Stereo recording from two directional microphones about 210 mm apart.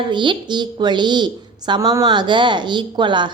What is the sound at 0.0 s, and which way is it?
A woman's voice, 20° right (ahead or behind).